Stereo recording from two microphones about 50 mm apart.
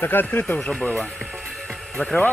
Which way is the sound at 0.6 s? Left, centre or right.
Centre.